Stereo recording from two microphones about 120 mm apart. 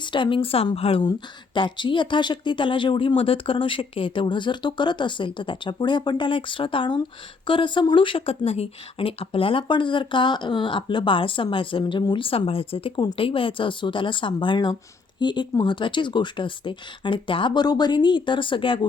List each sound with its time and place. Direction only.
0.0 s speech: 45° left (ahead or behind)